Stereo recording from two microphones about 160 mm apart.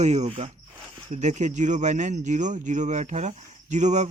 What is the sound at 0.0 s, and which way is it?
Speech, 45° right (ahead or behind).